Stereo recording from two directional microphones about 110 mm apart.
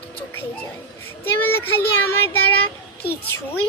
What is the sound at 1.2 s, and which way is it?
A child's voice, 20° left (ahead or behind).